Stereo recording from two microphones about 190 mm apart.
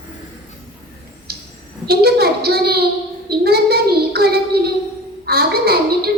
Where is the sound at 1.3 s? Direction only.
55° right (ahead or behind).